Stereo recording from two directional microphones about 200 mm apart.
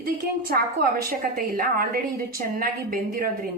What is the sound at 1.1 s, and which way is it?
A woman's voice, 45° right (ahead or behind).